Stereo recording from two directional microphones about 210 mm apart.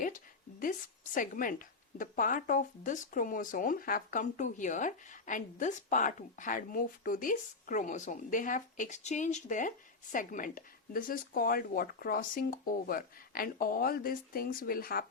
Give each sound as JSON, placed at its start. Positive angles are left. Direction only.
{"t": 0.6, "sound": "a woman's voice", "side_deg": 40}